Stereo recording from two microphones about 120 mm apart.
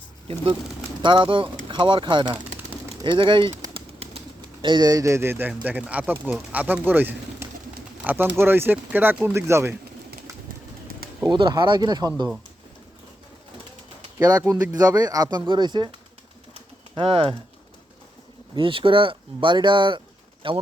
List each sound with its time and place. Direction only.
1.0 s speech: 45° right (ahead or behind)
3.8 s bird: 50° right (ahead or behind); by 5.5 s 20° right (ahead or behind)
5.5 s speech: 10° right (ahead or behind)
11.3 s speech: 40° right (ahead or behind)
14.2 s speech: 30° right (ahead or behind)
16.9 s speech: 50° right (ahead or behind)
18.5 s speech: 45° right (ahead or behind)